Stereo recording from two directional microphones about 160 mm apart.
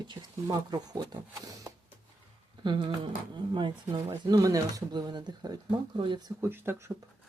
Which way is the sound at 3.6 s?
30° right (ahead or behind).